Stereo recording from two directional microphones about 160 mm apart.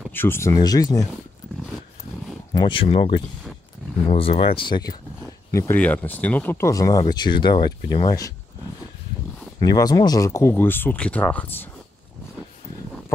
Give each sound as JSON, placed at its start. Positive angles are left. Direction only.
{"t": 0.1, "sound": "speech", "side_deg": 15}
{"t": 2.5, "sound": "speech", "side_deg": 30}
{"t": 4.6, "sound": "speech", "side_deg": 30}
{"t": 6.7, "sound": "speech", "side_deg": 20}
{"t": 9.6, "sound": "speech", "side_deg": 25}